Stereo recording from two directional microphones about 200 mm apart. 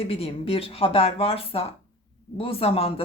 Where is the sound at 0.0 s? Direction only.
30° left (ahead or behind).